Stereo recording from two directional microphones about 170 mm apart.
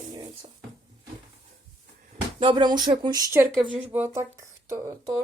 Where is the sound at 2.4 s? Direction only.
30° right (ahead or behind).